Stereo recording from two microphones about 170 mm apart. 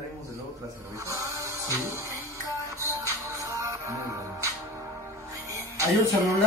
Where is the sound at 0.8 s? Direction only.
20° right (ahead or behind).